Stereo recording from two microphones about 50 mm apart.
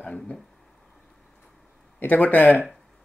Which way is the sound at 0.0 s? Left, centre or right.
Left.